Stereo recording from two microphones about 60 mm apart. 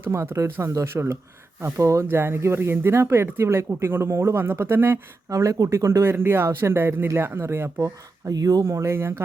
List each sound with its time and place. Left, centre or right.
0.1 s speech: right
1.8 s speech: right
2.0 s speech: right
4.4 s speech: right
5.3 s speech: right
7.8 s speech: right
8.6 s speech: right